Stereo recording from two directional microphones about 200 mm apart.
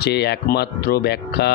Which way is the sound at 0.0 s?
55° left (ahead or behind).